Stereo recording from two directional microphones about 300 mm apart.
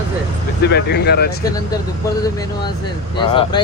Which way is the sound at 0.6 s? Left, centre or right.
Left.